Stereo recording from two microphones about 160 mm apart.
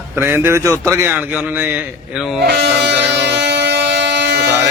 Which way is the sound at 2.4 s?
90° right.